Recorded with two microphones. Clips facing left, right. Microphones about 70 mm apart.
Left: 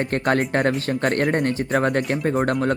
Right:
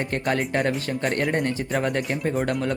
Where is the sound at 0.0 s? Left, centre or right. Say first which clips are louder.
Left 4 dB; left.